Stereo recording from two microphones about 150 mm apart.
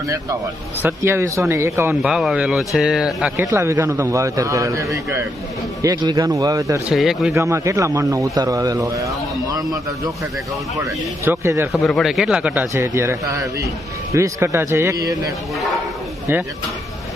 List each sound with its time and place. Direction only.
0.8 s speech: 15° right (ahead or behind)
2.0 s a man's voice: centre (ahead or behind)
3.4 s a man's voice: 20° right (ahead or behind)
6.9 s a man's voice: centre (ahead or behind)
7.3 s a man's voice: 20° right (ahead or behind)
11.3 s speech: 15° right (ahead or behind)
11.7 s a man's voice: 5° left (ahead or behind)
12.7 s a man's voice: 20° right (ahead or behind)